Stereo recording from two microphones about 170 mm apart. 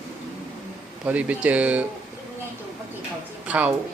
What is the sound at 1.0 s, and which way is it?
Speech, 10° right (ahead or behind).